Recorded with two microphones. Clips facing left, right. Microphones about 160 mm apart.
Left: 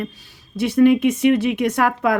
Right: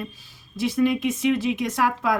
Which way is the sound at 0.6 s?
60° left (ahead or behind).